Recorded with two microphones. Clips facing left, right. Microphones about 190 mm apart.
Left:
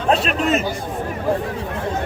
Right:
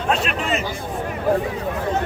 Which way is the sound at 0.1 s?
40° left (ahead or behind).